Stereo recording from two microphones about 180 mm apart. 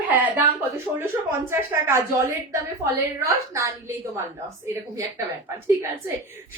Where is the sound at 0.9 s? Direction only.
15° right (ahead or behind).